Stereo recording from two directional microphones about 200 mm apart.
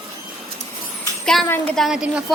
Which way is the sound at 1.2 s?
Centre (ahead or behind).